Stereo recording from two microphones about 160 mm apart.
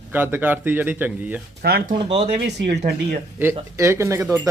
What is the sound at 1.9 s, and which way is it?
Speech, 30° right (ahead or behind).